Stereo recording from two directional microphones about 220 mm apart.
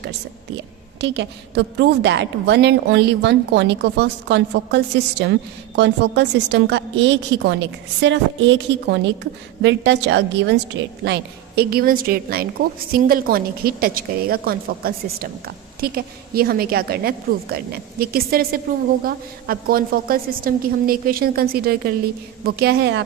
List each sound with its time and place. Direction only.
1.0 s a woman's voice: 55° right (ahead or behind)